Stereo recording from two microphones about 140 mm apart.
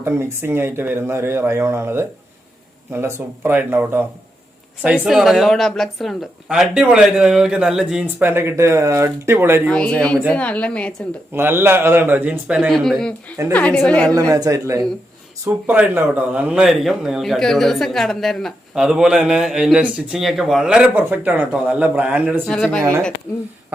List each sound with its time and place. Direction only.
0.0 s a man's voice: 15° right (ahead or behind)
8.2 s speech: 15° right (ahead or behind)
9.6 s a woman's voice: 5° left (ahead or behind)
11.3 s speech: 15° right (ahead or behind)
12.7 s a man's voice: 5° left (ahead or behind)
14.1 s a man's voice: 25° right (ahead or behind)
22.4 s a woman's voice: 5° left (ahead or behind)